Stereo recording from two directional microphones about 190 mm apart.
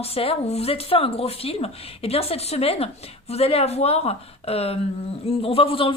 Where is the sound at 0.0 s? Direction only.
30° left (ahead or behind).